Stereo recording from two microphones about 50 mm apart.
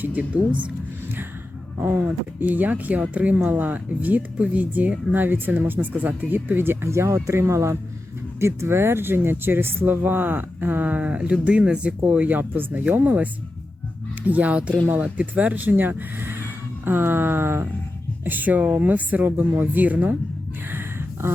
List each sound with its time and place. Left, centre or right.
0.0 s speech: right
1.8 s speech: right
5.9 s speech: right
6.9 s speech: right
8.4 s speech: right
12.4 s speech: right
12.8 s speech: right
18.3 s speech: right
20.7 s a sound: right